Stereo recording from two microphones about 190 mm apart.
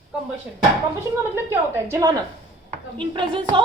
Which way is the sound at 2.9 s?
25° right (ahead or behind).